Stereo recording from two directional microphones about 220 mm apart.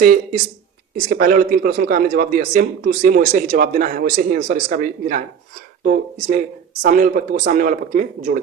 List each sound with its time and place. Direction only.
0.9 s a man's voice: 40° right (ahead or behind)